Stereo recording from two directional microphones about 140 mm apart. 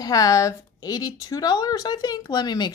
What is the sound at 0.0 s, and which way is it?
A woman's voice, 25° left (ahead or behind).